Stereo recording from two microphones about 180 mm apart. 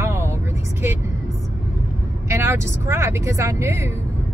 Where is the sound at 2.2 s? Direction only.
15° right (ahead or behind).